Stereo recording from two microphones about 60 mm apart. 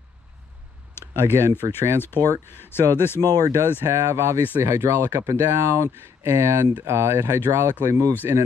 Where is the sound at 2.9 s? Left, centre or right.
Left.